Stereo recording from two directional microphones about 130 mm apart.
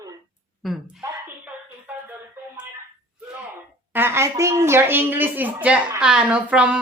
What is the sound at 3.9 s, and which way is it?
Speech, 20° right (ahead or behind).